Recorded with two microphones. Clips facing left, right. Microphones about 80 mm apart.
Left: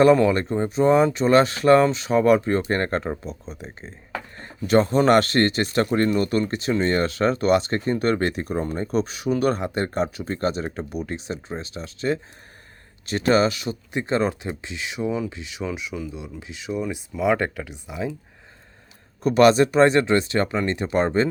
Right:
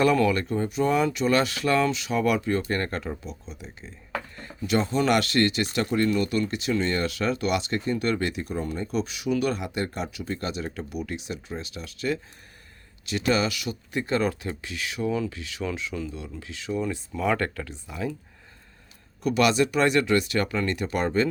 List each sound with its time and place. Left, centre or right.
0.0 s speech: left
19.2 s speech: left